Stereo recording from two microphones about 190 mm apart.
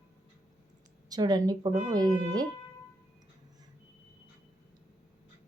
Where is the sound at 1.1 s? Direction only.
20° right (ahead or behind).